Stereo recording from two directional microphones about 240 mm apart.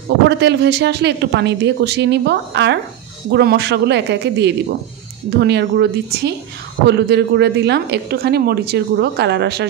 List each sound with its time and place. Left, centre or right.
0.3 s a woman's voice: right